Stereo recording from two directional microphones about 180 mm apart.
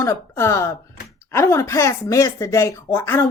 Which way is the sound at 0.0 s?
15° left (ahead or behind).